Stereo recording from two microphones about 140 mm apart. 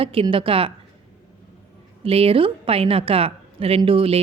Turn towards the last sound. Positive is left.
turn(degrees=-40)  # may be behind; listen again after turning